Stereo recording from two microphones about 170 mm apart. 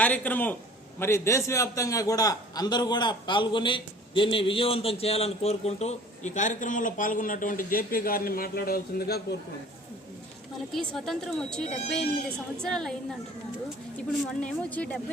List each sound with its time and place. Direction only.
0.0 s a man's voice: 10° left (ahead or behind); by 9.2 s 65° left (ahead or behind)
10.7 s speech: centre (ahead or behind)
14.4 s speech: 5° left (ahead or behind)